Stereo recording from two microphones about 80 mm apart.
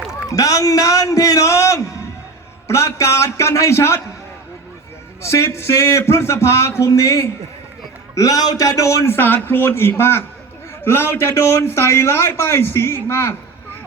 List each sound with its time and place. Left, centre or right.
0.3 s a man's voice: left
5.2 s a man's voice: left
9.0 s a man's voice: left